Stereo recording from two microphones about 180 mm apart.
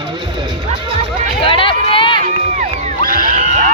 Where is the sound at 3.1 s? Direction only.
50° right (ahead or behind).